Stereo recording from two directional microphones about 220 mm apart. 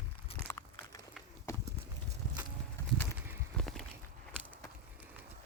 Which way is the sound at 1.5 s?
15° left (ahead or behind).